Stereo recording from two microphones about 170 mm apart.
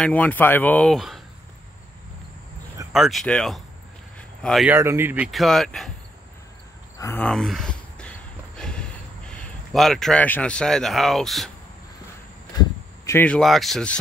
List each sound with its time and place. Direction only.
0.0 s speech: 10° left (ahead or behind)
2.9 s speech: centre (ahead or behind)
4.6 s speech: 15° right (ahead or behind)
5.3 s speech: centre (ahead or behind)
7.0 s speech: 15° left (ahead or behind)
7.2 s a sound: 5° left (ahead or behind)
13.0 s speech: 10° left (ahead or behind)